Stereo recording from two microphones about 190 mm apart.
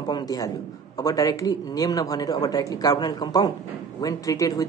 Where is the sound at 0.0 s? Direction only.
20° left (ahead or behind).